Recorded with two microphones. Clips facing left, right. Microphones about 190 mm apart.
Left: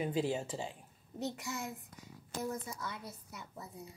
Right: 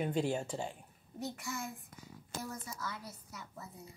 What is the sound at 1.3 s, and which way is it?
Speech, 20° left (ahead or behind).